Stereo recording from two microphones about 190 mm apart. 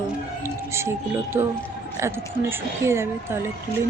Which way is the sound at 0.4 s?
15° right (ahead or behind).